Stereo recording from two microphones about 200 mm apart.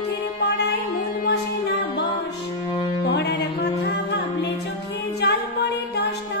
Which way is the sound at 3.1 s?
55° left (ahead or behind).